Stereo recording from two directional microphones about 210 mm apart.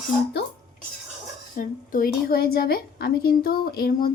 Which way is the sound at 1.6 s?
40° left (ahead or behind).